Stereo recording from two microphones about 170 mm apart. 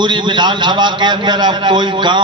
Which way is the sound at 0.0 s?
25° right (ahead or behind).